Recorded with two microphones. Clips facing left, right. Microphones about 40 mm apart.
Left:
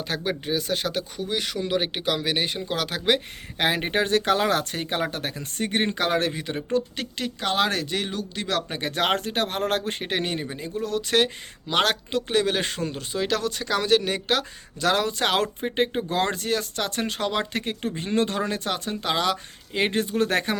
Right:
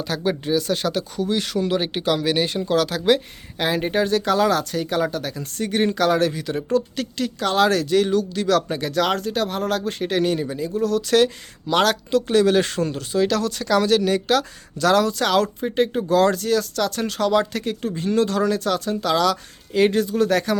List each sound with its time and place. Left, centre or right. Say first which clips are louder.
0.0 s speech: right 4 dB; left
3.6 s speech: right 2 dB; left